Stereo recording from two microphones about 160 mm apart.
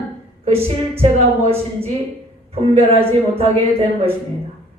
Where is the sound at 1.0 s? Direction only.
40° right (ahead or behind).